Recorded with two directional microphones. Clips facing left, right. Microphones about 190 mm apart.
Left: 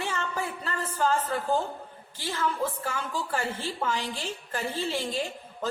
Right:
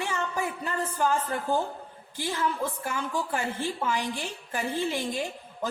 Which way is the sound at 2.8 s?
15° right (ahead or behind).